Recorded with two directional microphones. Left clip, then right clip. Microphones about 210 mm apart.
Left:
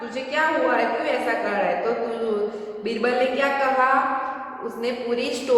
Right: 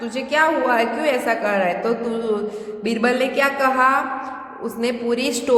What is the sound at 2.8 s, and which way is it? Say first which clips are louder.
A woman's voice: right 2 dB; 55° right (ahead or behind).